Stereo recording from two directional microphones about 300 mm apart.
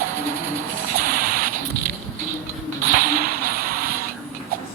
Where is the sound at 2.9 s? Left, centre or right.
Right.